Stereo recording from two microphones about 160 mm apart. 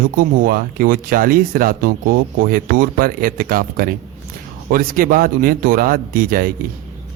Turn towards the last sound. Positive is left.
turn(degrees=-60)  # may be behind; listen again after turning